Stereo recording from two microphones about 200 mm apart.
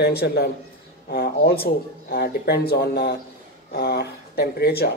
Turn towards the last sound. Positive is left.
turn(degrees=50)  # may be behind; listen again after turning